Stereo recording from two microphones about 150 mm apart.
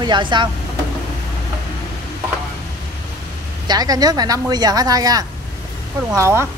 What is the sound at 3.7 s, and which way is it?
Speech, 25° right (ahead or behind).